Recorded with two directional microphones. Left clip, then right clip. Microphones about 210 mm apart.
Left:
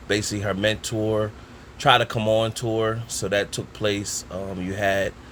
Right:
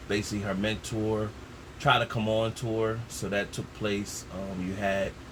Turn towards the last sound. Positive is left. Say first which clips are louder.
# left 7 dB
turn(degrees=55)  # may be behind; listen again after turning